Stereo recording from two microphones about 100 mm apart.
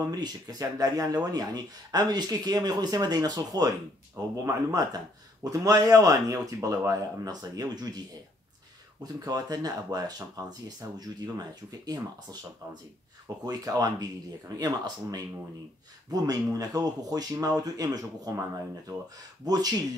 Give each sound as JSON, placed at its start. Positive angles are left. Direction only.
{"t": 0.0, "sound": "speech", "side_deg": -40}
{"t": 9.0, "sound": "speech", "side_deg": -40}
{"t": 13.5, "sound": "speech", "side_deg": -40}
{"t": 19.4, "sound": "speech", "side_deg": -40}